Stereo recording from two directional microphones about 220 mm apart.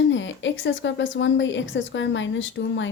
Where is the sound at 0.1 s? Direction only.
55° left (ahead or behind).